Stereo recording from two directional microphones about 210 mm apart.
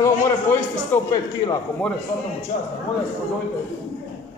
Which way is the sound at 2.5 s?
40° left (ahead or behind).